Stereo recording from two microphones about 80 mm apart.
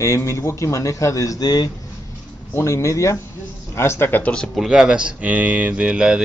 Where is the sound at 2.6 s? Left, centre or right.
Left; by 4.4 s centre.